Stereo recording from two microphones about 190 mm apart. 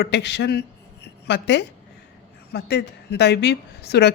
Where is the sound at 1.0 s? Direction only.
65° left (ahead or behind).